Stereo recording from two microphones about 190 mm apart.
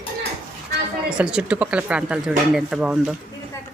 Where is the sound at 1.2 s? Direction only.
5° right (ahead or behind).